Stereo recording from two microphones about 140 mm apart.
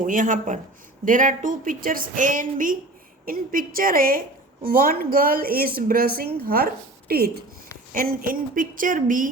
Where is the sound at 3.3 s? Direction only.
90° right.